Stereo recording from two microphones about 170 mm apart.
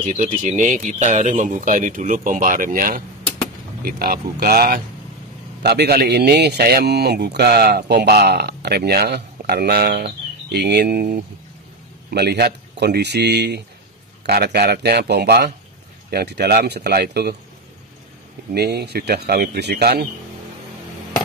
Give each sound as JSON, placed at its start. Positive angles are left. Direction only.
{"t": 0.0, "sound": "speech", "side_deg": -50}
{"t": 5.6, "sound": "speech", "side_deg": -75}
{"t": 18.5, "sound": "speech", "side_deg": -70}